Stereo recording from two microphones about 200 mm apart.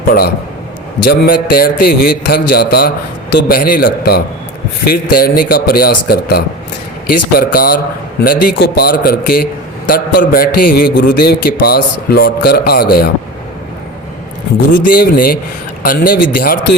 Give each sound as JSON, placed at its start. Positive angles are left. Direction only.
{"t": 0.1, "sound": "a man's voice", "side_deg": 50}
{"t": 14.9, "sound": "a man's voice", "side_deg": 50}